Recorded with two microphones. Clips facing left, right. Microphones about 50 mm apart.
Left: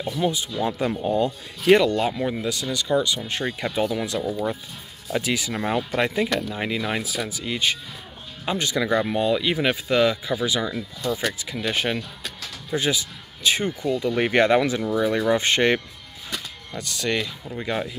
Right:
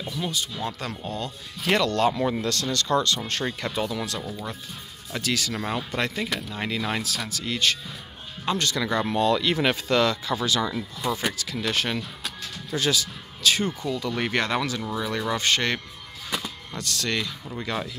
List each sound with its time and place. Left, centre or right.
0.0 s speech: centre